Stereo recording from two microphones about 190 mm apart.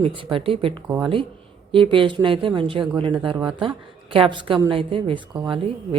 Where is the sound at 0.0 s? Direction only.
25° right (ahead or behind).